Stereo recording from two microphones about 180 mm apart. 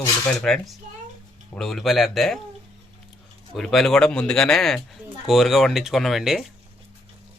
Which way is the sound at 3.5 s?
Centre (ahead or behind).